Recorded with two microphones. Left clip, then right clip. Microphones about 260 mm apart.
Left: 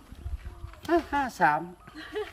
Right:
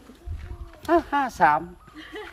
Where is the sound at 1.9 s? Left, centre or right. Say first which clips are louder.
Left 4 dB; left.